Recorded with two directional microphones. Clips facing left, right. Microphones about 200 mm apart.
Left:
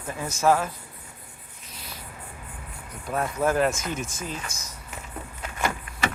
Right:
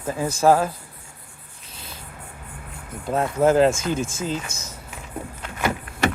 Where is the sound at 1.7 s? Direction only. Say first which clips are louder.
Right 1 dB; 25° right (ahead or behind).